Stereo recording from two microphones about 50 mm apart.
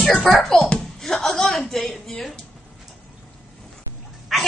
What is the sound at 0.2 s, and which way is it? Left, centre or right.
Speech, centre.